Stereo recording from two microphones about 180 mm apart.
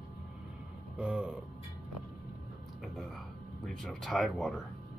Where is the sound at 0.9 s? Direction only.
5° right (ahead or behind).